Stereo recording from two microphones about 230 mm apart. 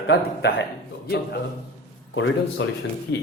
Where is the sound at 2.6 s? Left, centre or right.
Left.